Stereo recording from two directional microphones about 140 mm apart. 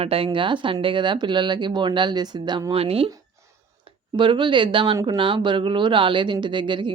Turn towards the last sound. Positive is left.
turn(degrees=-35)  # may be behind; listen again after turning